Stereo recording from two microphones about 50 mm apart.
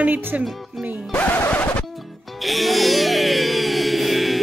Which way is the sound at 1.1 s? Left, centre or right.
Left.